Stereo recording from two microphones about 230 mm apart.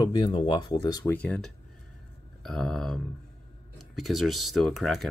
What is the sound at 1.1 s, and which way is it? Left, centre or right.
Speech, centre.